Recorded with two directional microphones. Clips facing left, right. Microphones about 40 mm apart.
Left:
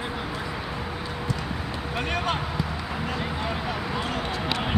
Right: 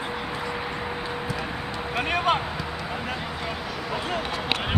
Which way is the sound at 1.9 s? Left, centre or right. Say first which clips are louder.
Right 4 dB; centre.